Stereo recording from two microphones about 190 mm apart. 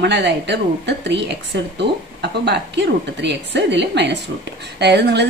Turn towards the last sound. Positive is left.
turn(degrees=-60)  # may be behind; listen again after turning